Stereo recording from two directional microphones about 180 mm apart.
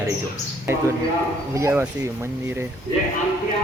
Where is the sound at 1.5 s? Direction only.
15° right (ahead or behind).